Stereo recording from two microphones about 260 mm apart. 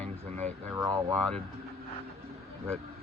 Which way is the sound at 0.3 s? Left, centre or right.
Right.